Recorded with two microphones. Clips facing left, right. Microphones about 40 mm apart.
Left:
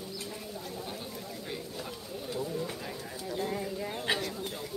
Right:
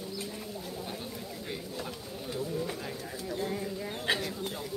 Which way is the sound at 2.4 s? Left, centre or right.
Centre.